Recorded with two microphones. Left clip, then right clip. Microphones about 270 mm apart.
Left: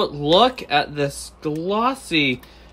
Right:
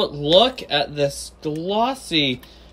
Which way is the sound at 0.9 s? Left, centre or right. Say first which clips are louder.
Right 2 dB; centre.